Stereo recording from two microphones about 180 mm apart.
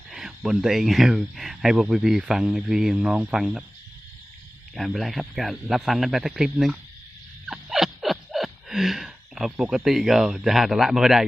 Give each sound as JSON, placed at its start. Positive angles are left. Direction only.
{"t": 0.1, "sound": "speech", "side_deg": 0}
{"t": 4.7, "sound": "speech", "side_deg": 0}
{"t": 7.4, "sound": "a sound", "side_deg": 0}